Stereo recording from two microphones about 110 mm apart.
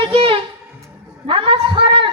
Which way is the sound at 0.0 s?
55° right (ahead or behind).